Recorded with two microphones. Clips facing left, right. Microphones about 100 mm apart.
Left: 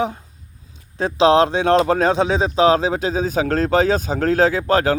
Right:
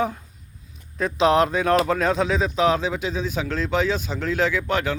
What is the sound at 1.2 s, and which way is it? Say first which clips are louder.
Speech: left 4 dB; 30° left (ahead or behind).